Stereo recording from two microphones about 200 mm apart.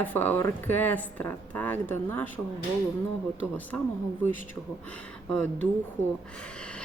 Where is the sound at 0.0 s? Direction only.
10° left (ahead or behind).